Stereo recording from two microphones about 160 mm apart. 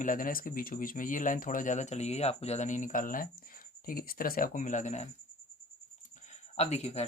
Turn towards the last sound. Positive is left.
turn(degrees=40)  # may be behind; listen again after turning